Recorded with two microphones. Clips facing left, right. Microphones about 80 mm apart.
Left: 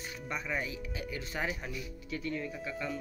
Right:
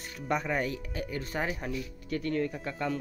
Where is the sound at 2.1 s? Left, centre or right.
Right.